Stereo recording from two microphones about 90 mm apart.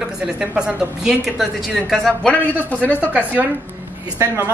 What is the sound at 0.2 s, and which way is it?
A man's voice, 10° right (ahead or behind).